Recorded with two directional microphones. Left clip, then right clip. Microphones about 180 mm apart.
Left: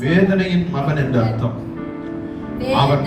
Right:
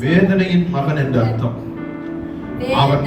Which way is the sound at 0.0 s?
25° right (ahead or behind).